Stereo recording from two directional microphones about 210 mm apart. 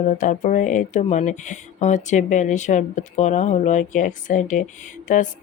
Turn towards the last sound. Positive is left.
turn(degrees=40)  # may be behind; listen again after turning